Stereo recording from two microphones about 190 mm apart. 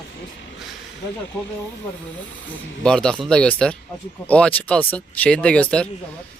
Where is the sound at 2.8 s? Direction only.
5° left (ahead or behind).